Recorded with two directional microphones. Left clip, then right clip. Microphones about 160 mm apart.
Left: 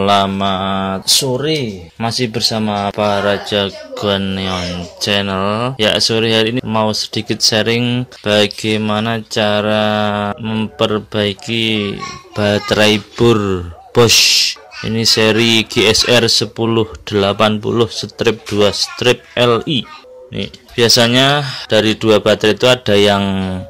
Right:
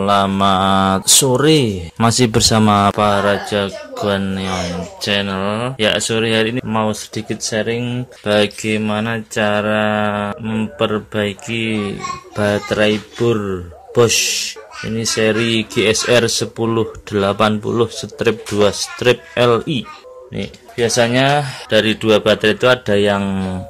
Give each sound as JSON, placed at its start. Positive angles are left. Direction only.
{"t": 0.0, "sound": "speech", "side_deg": 10}
{"t": 0.3, "sound": "mantra", "side_deg": -10}
{"t": 1.3, "sound": "speech", "side_deg": -40}
{"t": 3.2, "sound": "speech", "side_deg": 0}
{"t": 8.2, "sound": "speech", "side_deg": 20}
{"t": 20.7, "sound": "speech", "side_deg": 30}
{"t": 21.6, "sound": "speech", "side_deg": 25}